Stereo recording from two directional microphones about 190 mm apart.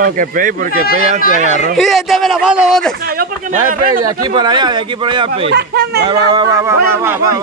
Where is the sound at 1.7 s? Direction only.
Centre (ahead or behind).